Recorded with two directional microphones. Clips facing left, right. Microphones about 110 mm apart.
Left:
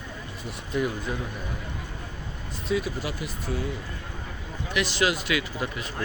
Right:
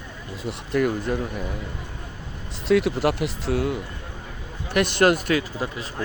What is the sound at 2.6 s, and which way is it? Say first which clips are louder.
Speech: right 9 dB; 75° right (ahead or behind).